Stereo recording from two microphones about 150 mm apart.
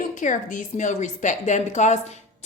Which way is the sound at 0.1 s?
60° left (ahead or behind).